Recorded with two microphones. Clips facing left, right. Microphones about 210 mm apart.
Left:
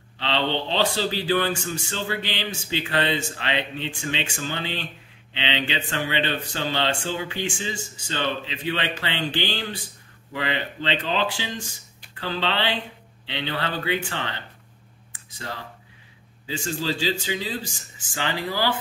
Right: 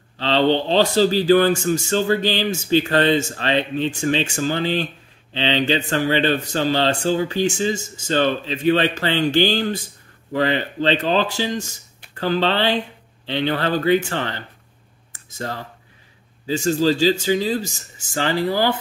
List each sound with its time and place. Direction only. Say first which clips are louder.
0.2 s speech: right 8 dB; 40° right (ahead or behind)
15.1 s a sound: right 7 dB; 45° right (ahead or behind)
16.4 s speech: right 10 dB; 40° right (ahead or behind)